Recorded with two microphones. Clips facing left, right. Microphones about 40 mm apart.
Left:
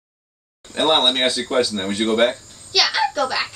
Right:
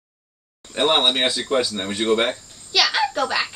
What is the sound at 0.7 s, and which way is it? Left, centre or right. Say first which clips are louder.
Speech: left 1 dB; centre.